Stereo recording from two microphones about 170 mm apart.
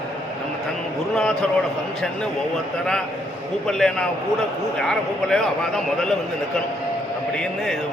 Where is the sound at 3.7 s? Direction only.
5° left (ahead or behind).